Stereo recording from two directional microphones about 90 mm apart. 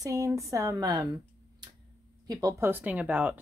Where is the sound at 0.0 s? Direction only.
35° right (ahead or behind).